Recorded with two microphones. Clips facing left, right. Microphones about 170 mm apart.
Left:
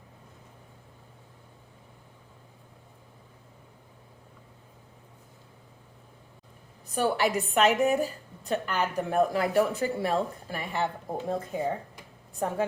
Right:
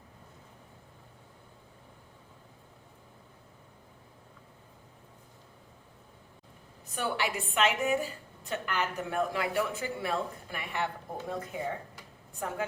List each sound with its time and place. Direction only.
6.9 s a woman's voice: 40° left (ahead or behind)